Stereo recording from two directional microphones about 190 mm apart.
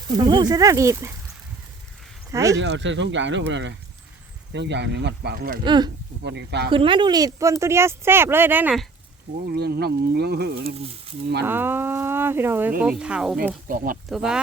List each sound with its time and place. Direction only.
0.2 s speech: 20° right (ahead or behind)
2.3 s speech: 15° right (ahead or behind)
2.6 s speech: 70° right (ahead or behind); by 5.5 s 55° right (ahead or behind)
5.6 s speech: 25° right (ahead or behind)
6.2 s speech: 65° right (ahead or behind)
6.7 s speech: 25° right (ahead or behind); by 8.8 s 10° right (ahead or behind)
9.5 s speech: 55° right (ahead or behind)
11.4 s speech: 10° right (ahead or behind)
13.7 s speech: 45° right (ahead or behind)
14.1 s speech: 5° right (ahead or behind)